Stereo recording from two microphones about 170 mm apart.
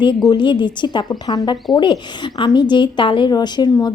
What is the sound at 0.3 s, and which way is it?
A woman's voice, 25° left (ahead or behind).